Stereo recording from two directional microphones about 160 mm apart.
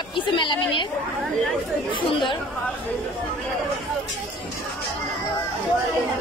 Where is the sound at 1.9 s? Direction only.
30° left (ahead or behind).